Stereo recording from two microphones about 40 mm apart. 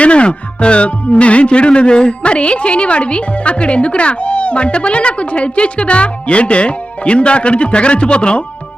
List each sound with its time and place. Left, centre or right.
0.0 s speech: left